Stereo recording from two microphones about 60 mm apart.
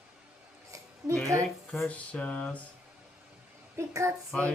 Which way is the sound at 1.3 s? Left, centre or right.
Right.